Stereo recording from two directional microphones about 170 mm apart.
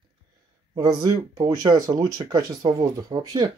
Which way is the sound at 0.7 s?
20° right (ahead or behind).